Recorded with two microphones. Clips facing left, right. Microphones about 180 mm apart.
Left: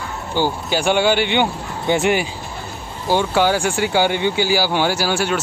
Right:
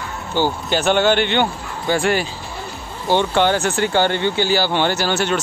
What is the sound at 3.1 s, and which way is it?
Speech, 5° left (ahead or behind).